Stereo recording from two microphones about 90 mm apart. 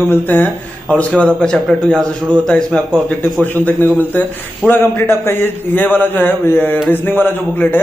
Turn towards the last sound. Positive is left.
turn(degrees=25)  # may be behind; listen again after turning